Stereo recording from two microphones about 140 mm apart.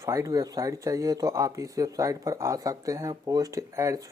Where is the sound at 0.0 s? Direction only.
20° right (ahead or behind).